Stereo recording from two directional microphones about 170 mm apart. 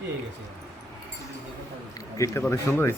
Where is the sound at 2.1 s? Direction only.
20° left (ahead or behind).